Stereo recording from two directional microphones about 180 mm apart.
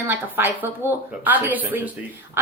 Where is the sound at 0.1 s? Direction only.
10° right (ahead or behind).